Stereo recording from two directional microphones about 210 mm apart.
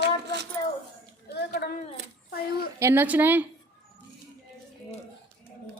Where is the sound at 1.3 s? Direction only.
50° left (ahead or behind).